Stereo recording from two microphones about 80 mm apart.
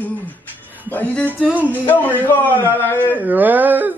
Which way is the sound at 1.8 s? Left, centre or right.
Left.